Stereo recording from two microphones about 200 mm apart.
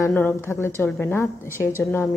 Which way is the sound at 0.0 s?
10° left (ahead or behind).